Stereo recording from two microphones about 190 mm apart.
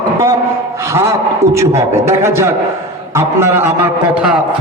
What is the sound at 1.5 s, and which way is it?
A man's voice, 15° right (ahead or behind).